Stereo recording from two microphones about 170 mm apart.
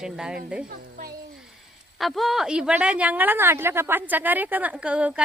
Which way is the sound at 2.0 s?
Centre (ahead or behind).